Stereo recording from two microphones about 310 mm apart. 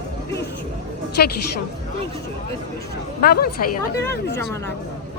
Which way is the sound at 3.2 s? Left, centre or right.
Left.